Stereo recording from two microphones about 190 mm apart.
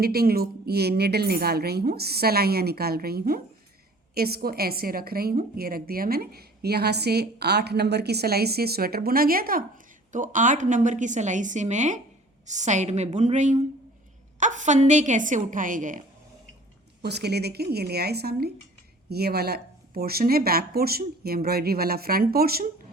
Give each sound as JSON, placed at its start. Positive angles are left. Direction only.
{"t": 0.0, "sound": "a woman's voice", "side_deg": -55}
{"t": 17.0, "sound": "a woman's voice", "side_deg": -60}